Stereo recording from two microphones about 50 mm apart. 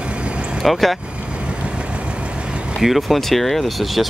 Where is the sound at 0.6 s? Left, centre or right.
Centre.